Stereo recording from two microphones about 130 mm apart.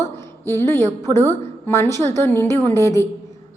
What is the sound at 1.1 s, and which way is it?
A woman's voice, 15° left (ahead or behind).